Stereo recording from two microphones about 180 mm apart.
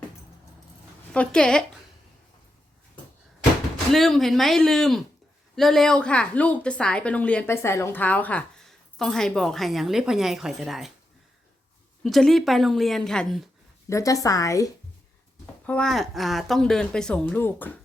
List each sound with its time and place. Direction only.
1.1 s a woman's voice: 5° left (ahead or behind)
3.9 s a woman's voice: centre (ahead or behind)
12.0 s a woman's voice: centre (ahead or behind)
13.9 s a woman's voice: 20° left (ahead or behind)
15.6 s a woman's voice: 5° left (ahead or behind)